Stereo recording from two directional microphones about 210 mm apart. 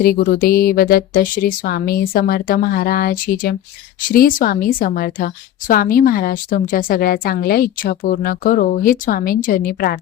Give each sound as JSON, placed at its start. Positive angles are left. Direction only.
{"t": 0.0, "sound": "a woman's voice", "side_deg": 45}